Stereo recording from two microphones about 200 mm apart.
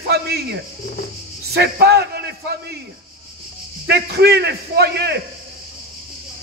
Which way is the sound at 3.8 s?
55° right (ahead or behind).